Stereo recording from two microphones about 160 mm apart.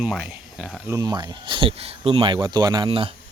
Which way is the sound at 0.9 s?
20° right (ahead or behind).